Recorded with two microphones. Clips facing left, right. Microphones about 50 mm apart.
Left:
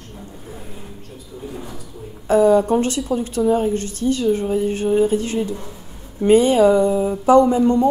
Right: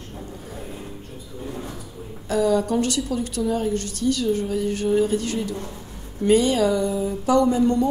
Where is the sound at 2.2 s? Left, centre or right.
Left.